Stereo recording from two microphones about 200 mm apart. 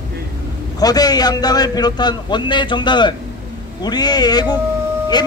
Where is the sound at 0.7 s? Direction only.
20° left (ahead or behind).